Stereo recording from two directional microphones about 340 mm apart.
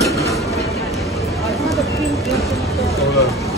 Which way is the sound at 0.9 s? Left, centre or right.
Centre.